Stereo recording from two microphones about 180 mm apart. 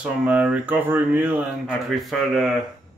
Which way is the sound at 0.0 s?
10° right (ahead or behind).